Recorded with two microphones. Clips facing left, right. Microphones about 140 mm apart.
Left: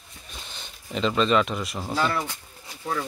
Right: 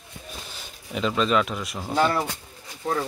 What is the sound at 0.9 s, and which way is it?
Speech, 5° right (ahead or behind).